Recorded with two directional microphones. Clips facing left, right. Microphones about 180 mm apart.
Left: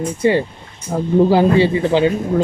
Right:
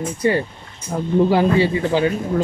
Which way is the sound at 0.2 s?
25° left (ahead or behind).